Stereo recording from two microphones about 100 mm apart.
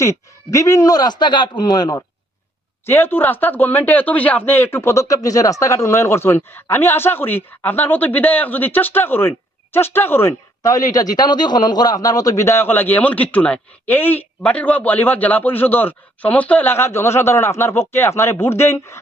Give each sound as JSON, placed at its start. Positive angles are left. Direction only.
{"t": 0.0, "sound": "speech", "side_deg": 30}
{"t": 2.8, "sound": "speech", "side_deg": 20}